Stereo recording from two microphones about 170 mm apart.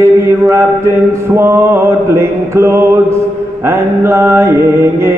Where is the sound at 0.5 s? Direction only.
15° right (ahead or behind).